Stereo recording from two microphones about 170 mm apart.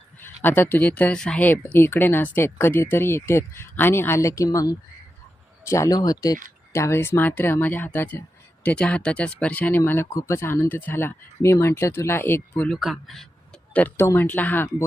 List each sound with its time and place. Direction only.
0.2 s speech: 10° left (ahead or behind)
13.7 s speech: 10° left (ahead or behind)